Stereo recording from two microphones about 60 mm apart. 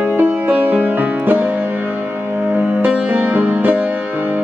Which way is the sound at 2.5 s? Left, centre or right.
Right.